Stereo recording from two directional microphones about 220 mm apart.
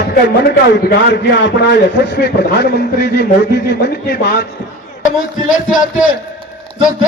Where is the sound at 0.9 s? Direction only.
50° left (ahead or behind).